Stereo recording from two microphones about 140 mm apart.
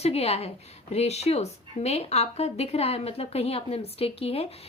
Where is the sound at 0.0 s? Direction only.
50° left (ahead or behind).